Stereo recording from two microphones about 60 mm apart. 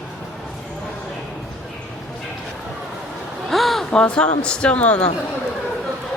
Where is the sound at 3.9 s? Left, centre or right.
Centre.